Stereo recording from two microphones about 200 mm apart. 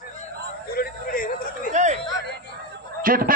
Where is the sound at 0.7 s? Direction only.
45° left (ahead or behind).